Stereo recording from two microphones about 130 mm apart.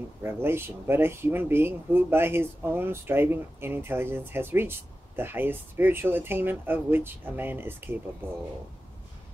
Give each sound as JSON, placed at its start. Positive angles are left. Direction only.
{"t": 0.2, "sound": "speech", "side_deg": -20}